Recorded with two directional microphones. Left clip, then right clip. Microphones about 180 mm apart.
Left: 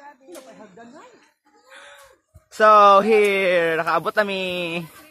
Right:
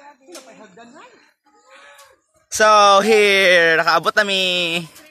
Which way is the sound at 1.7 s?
5° left (ahead or behind).